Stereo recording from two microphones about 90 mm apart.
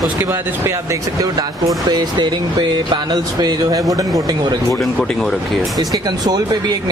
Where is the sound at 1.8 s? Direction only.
55° right (ahead or behind).